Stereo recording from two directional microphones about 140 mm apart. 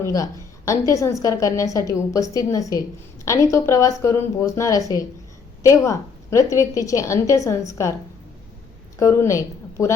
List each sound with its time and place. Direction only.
0.0 s a woman's voice: 20° left (ahead or behind)
9.0 s a woman's voice: 20° left (ahead or behind)